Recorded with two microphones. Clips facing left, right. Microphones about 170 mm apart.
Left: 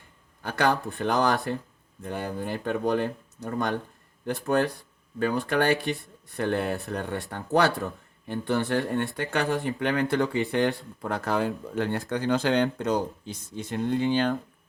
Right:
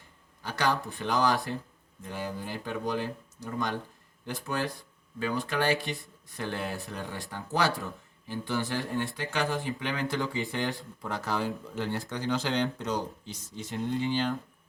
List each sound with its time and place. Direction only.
0.4 s speech: 55° left (ahead or behind)